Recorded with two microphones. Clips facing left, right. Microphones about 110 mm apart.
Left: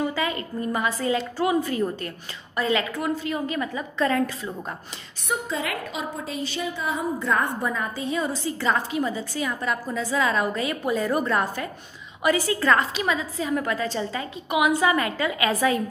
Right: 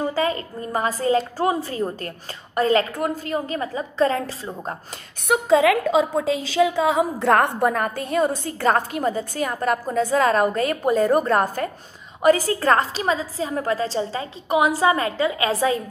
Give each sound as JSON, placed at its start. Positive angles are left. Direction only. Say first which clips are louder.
{"t": 0.0, "sound": "a woman's voice", "louder": "right 3 dB", "side_deg": -35}
{"t": 2.5, "sound": "a woman's voice", "louder": "right 5 dB", "side_deg": -40}
{"t": 5.3, "sound": "a woman's voice", "louder": "right 11 dB", "side_deg": -90}